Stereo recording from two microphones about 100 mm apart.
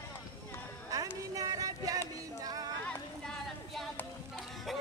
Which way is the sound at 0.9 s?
35° right (ahead or behind).